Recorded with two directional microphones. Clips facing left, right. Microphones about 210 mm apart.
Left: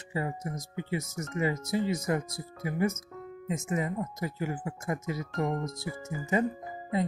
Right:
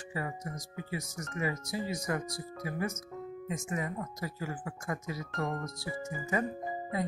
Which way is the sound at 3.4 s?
25° left (ahead or behind).